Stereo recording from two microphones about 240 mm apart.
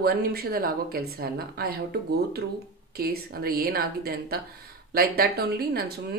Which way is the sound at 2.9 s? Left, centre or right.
Right.